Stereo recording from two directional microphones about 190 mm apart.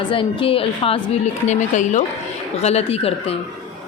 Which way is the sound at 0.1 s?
30° left (ahead or behind).